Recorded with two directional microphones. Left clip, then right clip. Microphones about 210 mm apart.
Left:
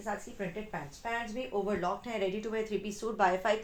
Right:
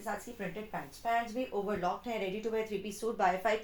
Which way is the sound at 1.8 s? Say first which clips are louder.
Left 1 dB; 35° left (ahead or behind).